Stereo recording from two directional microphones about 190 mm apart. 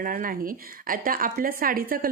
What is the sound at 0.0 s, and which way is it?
Speech, 45° right (ahead or behind).